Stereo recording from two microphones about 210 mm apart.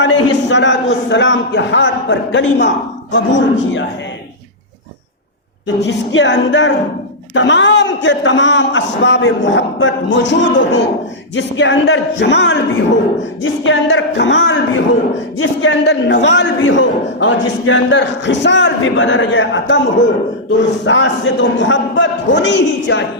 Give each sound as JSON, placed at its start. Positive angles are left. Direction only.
{"t": 0.0, "sound": "a man's voice", "side_deg": 60}
{"t": 5.6, "sound": "a man's voice", "side_deg": 60}
{"t": 20.8, "sound": "a man's voice", "side_deg": 60}